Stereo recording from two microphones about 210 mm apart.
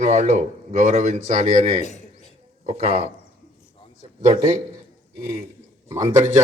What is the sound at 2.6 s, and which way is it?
Speech, 30° right (ahead or behind).